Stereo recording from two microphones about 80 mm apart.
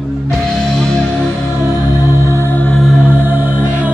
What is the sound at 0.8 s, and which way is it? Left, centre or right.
Music, centre.